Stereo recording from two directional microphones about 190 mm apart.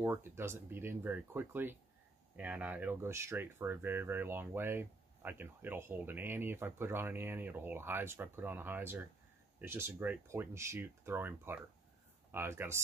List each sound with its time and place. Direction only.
0.0 s speech: 10° right (ahead or behind)